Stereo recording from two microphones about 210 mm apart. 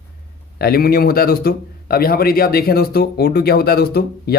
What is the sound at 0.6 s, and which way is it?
A man's voice, 45° left (ahead or behind).